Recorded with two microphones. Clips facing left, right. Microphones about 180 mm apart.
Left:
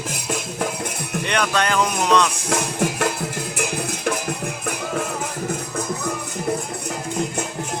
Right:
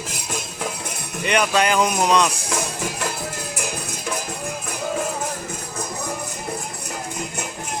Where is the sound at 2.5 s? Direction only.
60° left (ahead or behind).